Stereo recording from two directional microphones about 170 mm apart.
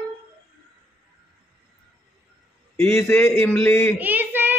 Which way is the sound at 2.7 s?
15° left (ahead or behind).